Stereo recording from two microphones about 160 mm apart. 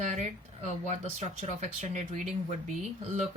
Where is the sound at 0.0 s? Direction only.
45° right (ahead or behind).